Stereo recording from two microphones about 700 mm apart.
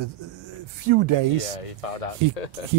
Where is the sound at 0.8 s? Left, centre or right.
Right.